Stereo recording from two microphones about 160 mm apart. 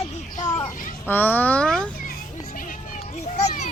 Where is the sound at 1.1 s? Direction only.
10° left (ahead or behind).